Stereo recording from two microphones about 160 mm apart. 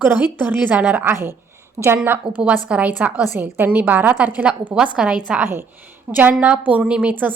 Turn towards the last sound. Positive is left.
turn(degrees=-10)  # may be behind; listen again after turning